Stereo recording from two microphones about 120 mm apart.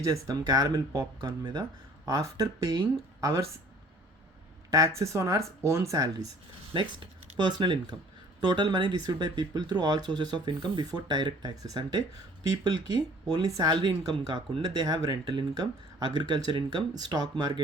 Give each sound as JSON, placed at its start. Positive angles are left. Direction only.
{"t": 0.0, "sound": "a woman's voice", "side_deg": -30}
{"t": 4.7, "sound": "speech", "side_deg": -25}
{"t": 7.3, "sound": "speech", "side_deg": -40}